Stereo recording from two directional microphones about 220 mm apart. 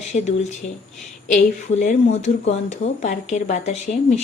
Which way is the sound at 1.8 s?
30° left (ahead or behind).